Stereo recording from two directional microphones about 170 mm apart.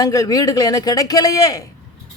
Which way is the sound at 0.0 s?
20° left (ahead or behind).